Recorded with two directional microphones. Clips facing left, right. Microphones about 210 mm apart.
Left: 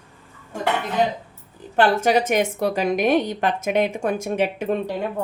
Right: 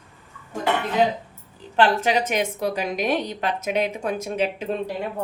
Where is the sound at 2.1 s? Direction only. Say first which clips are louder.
Left 4 dB; 50° left (ahead or behind).